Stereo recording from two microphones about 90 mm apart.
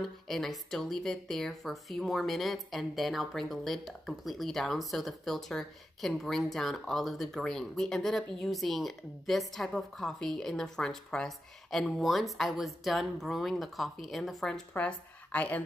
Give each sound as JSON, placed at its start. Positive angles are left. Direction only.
{"t": 0.0, "sound": "speech", "side_deg": 0}
{"t": 14.7, "sound": "speech", "side_deg": 15}